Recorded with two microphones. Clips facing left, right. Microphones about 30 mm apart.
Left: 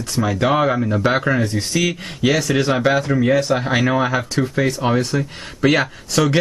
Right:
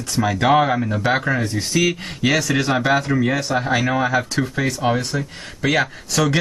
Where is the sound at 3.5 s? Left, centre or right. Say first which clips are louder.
Left 2 dB; centre.